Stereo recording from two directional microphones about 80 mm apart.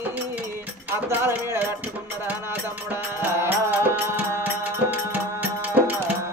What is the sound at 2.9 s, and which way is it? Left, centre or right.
Music, right.